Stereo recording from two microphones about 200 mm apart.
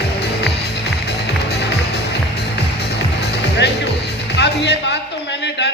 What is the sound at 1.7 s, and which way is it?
Music, 55° left (ahead or behind).